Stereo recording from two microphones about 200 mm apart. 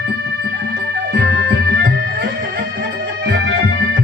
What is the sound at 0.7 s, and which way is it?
Music, 55° right (ahead or behind).